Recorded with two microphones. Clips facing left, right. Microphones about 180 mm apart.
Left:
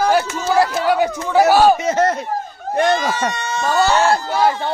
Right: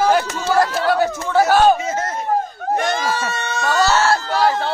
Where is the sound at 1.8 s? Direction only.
70° left (ahead or behind).